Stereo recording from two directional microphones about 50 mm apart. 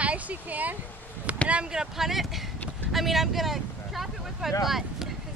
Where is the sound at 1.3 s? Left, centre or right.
Right.